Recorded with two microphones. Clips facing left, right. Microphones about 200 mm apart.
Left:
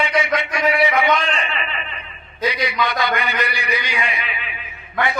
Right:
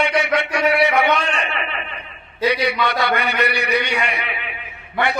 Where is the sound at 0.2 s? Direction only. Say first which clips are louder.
Right 1 dB; 65° right (ahead or behind).